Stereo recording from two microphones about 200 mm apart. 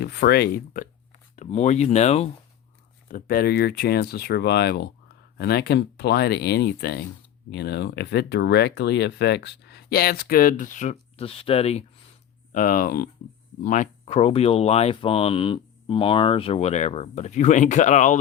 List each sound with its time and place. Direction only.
0.0 s speech: 50° left (ahead or behind)
1.4 s speech: 35° left (ahead or behind)
3.1 s speech: 45° left (ahead or behind)
12.5 s speech: 40° left (ahead or behind)